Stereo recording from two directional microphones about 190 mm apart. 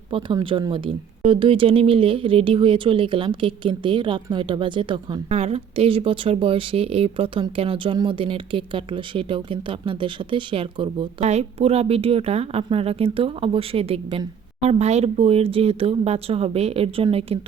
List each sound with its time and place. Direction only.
0.1 s speech: 25° right (ahead or behind)